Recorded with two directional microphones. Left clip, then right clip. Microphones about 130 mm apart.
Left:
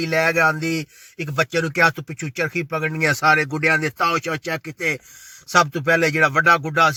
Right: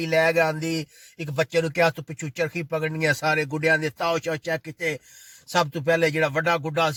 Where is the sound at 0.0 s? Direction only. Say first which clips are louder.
Left 3 dB; 15° right (ahead or behind).